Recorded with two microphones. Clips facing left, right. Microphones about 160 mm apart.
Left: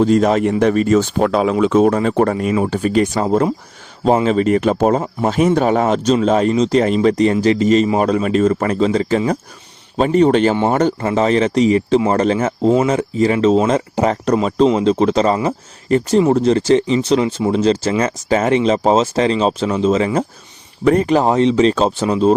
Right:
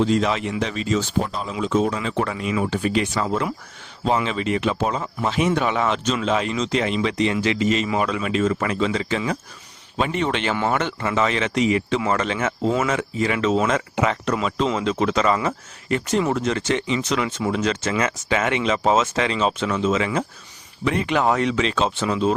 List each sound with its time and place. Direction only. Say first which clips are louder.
0.0 s speech: left 7 dB; 45° left (ahead or behind)
10.5 s speech: left 7 dB; 30° left (ahead or behind)